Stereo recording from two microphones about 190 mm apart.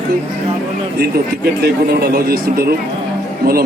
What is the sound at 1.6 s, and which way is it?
A man's voice, 55° right (ahead or behind).